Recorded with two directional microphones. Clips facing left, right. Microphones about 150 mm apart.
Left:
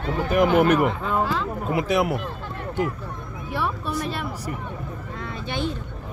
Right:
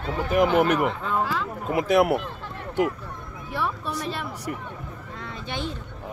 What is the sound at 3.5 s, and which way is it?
Speech, 5° left (ahead or behind).